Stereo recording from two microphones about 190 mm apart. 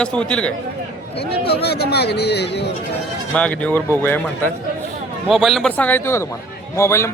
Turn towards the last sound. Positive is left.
turn(degrees=15)  # may be behind; listen again after turning